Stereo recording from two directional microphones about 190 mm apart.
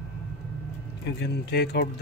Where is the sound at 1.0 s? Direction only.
60° left (ahead or behind).